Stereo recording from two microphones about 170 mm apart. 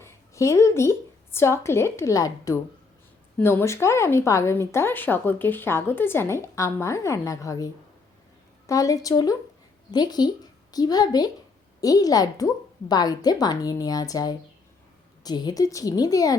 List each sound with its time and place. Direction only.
0.0 s a woman's voice: 15° left (ahead or behind)